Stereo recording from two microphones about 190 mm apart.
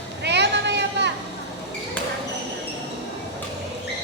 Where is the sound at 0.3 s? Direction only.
65° right (ahead or behind).